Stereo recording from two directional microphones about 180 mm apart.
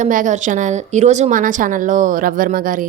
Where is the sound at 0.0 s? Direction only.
45° right (ahead or behind).